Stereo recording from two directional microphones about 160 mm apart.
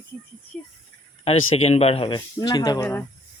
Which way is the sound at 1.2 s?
40° left (ahead or behind).